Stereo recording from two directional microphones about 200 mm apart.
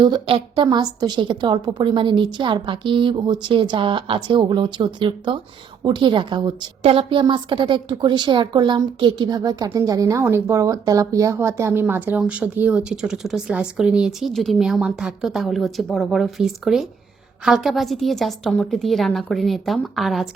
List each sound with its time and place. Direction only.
0.0 s a woman's voice: 25° right (ahead or behind); by 20.2 s centre (ahead or behind)